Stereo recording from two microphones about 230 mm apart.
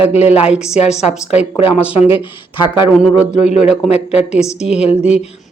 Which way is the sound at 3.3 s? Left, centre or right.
Left.